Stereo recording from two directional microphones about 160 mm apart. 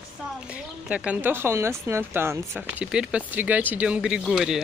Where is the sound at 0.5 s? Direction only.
5° right (ahead or behind).